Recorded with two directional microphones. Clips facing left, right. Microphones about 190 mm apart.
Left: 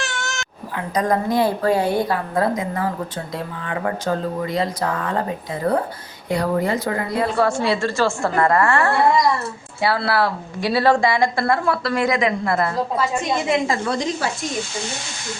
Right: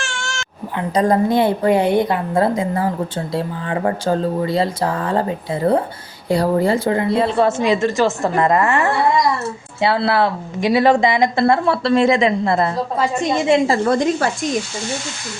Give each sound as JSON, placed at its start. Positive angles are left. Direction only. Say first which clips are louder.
{"t": 0.0, "sound": "cat", "louder": "even", "side_deg": 20}
{"t": 0.8, "sound": "a woman's voice", "louder": "right 5 dB", "side_deg": -30}
{"t": 13.8, "sound": "a woman's voice", "louder": "right 6 dB", "side_deg": -50}